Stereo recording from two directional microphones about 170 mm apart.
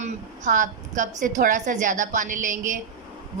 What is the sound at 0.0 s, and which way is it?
A woman's voice, 45° right (ahead or behind).